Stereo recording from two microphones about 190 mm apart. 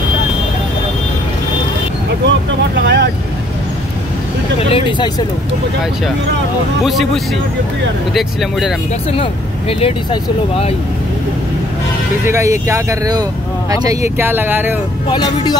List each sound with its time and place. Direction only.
2.2 s vehicle: 65° right (ahead or behind)
4.6 s speech: 30° left (ahead or behind)
6.8 s speech: centre (ahead or behind)
8.1 s speech: centre (ahead or behind)
9.1 s speech: 30° left (ahead or behind)
12.3 s speech: 15° right (ahead or behind)
15.0 s speech: 25° left (ahead or behind)